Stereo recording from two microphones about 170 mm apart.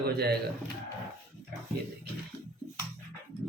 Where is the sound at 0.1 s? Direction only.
70° right (ahead or behind).